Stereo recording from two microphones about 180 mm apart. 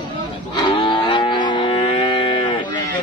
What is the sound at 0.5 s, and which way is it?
Livestock, 25° left (ahead or behind).